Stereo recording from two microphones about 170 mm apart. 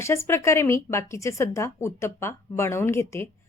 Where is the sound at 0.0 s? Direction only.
15° left (ahead or behind).